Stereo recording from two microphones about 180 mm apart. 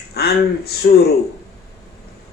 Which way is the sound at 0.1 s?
60° left (ahead or behind).